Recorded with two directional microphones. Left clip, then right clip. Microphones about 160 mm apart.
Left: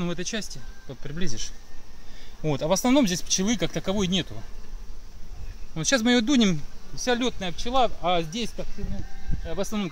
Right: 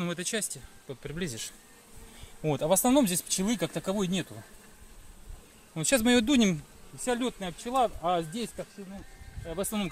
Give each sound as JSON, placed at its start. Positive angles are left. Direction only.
{"t": 0.0, "sound": "speech", "side_deg": -55}
{"t": 2.4, "sound": "speech", "side_deg": -35}
{"t": 5.8, "sound": "speech", "side_deg": -40}
{"t": 7.1, "sound": "speech", "side_deg": -10}
{"t": 9.6, "sound": "speech", "side_deg": -55}